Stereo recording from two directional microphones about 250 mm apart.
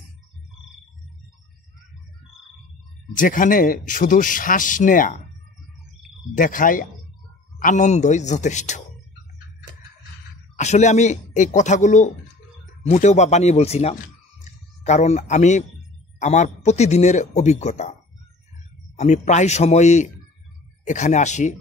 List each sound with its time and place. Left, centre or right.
3.2 s speech: left
6.3 s speech: left
10.5 s speech: left
14.4 s a sound: left
16.2 s speech: left
18.9 s speech: left